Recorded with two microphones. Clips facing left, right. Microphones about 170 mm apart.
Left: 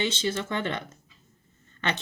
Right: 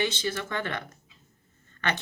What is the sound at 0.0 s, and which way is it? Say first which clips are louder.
Speech: left 1 dB; 25° left (ahead or behind).